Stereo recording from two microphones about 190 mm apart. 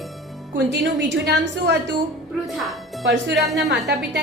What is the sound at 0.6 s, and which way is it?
A woman's voice, 65° right (ahead or behind).